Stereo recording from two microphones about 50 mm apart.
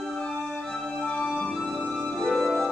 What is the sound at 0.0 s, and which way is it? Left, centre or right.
Music, centre.